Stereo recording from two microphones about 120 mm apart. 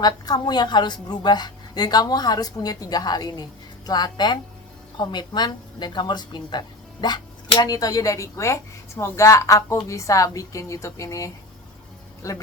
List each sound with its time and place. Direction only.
0.0 s a woman's voice: 35° left (ahead or behind)